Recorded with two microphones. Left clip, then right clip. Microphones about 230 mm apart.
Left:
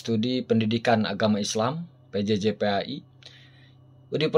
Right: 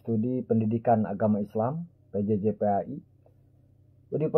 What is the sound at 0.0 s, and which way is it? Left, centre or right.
Speech, left.